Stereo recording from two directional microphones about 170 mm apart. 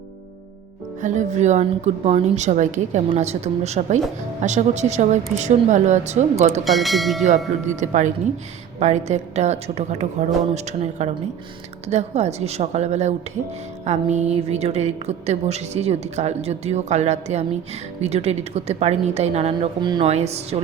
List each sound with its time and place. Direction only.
1.0 s a woman's voice: 45° right (ahead or behind)
6.7 s speech: centre (ahead or behind)
7.3 s a woman's voice: 45° right (ahead or behind)
19.8 s a woman's voice: 25° right (ahead or behind)
20.1 s a woman's voice: 40° right (ahead or behind)